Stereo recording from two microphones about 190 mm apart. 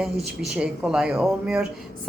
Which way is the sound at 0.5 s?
5° right (ahead or behind).